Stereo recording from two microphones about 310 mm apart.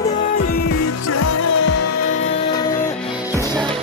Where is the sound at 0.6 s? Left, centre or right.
Left.